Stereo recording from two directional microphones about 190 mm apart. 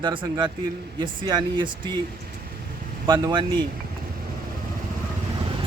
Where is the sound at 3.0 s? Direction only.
20° right (ahead or behind).